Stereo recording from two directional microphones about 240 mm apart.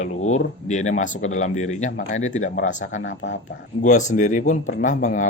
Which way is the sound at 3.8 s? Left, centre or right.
Left.